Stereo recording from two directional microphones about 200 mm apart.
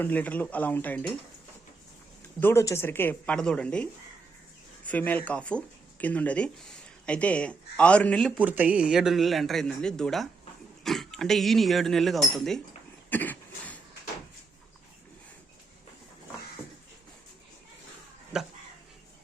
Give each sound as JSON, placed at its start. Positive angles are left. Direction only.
{"t": 0.0, "sound": "speech", "side_deg": 10}
{"t": 2.4, "sound": "speech", "side_deg": 15}
{"t": 4.9, "sound": "speech", "side_deg": 10}
{"t": 8.4, "sound": "speech", "side_deg": -10}
{"t": 13.1, "sound": "cough", "side_deg": 10}
{"t": 18.3, "sound": "a sound", "side_deg": -5}